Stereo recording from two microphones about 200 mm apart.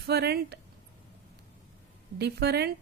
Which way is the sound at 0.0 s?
55° right (ahead or behind).